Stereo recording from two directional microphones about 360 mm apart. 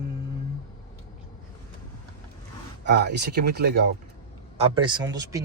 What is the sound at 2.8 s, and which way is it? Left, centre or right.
Speech, right.